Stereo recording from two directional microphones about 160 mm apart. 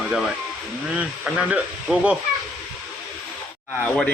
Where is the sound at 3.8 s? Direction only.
10° left (ahead or behind).